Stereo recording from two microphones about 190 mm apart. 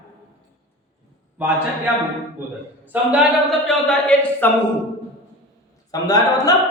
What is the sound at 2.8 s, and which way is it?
A man's voice, 5° right (ahead or behind).